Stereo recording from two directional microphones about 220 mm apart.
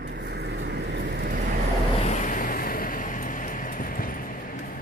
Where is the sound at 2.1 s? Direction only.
35° left (ahead or behind).